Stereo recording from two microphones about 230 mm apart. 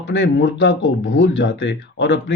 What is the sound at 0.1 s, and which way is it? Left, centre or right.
Speech, left.